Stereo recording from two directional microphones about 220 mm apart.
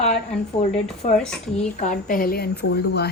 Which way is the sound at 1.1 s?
5° left (ahead or behind).